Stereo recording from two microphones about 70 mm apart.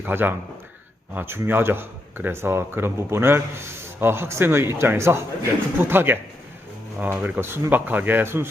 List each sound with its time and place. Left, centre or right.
0.0 s a man's voice: right
7.3 s a man's voice: right